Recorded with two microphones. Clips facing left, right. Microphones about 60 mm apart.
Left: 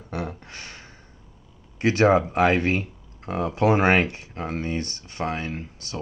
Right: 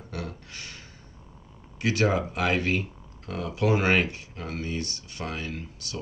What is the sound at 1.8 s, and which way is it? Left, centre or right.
Speech, left.